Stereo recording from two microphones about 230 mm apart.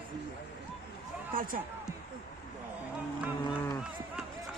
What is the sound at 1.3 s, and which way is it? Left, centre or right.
Speech, right.